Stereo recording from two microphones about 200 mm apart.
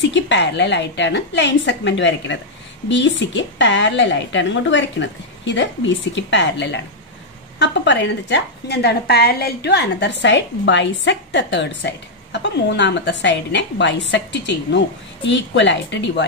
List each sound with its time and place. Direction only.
0.0 s a woman's voice: 65° left (ahead or behind)